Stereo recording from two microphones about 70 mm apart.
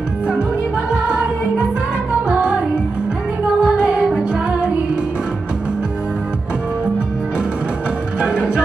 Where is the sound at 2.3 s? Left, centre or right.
Centre.